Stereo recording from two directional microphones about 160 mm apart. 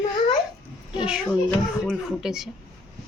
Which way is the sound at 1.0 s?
5° right (ahead or behind).